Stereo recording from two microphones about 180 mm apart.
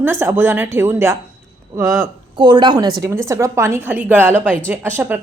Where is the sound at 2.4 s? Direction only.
25° right (ahead or behind).